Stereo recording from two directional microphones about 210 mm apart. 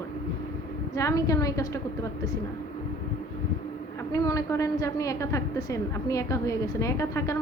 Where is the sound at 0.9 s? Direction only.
15° left (ahead or behind).